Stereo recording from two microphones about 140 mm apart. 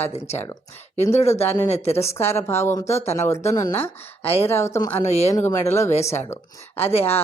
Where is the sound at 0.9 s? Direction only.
50° left (ahead or behind).